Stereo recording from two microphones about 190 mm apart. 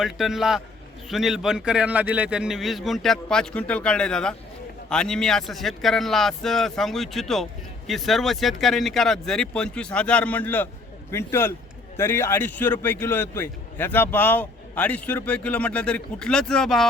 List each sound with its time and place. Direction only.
0.0 s a man's voice: centre (ahead or behind)